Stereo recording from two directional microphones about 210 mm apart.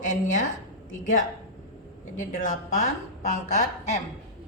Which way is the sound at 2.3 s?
40° left (ahead or behind).